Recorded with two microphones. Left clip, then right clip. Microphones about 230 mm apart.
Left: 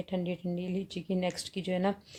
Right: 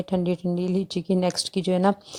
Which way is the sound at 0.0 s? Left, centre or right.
Right.